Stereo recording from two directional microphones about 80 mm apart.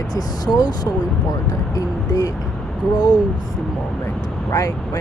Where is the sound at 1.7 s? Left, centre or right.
Left.